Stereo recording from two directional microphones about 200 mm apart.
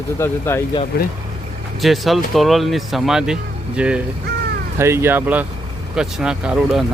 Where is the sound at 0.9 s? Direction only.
55° left (ahead or behind).